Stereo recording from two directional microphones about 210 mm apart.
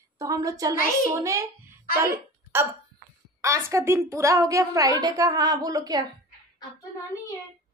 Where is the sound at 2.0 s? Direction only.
15° right (ahead or behind).